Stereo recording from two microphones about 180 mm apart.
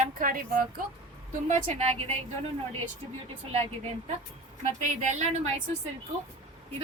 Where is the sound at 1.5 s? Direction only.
35° right (ahead or behind).